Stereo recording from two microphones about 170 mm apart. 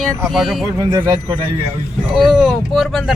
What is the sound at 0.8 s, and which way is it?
Speech, 20° right (ahead or behind).